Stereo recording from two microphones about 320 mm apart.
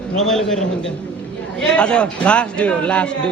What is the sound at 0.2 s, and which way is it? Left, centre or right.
A man's voice, centre.